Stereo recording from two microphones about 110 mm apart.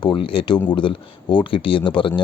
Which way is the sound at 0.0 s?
50° left (ahead or behind).